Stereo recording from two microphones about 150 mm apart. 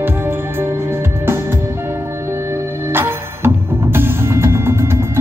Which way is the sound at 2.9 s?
15° right (ahead or behind).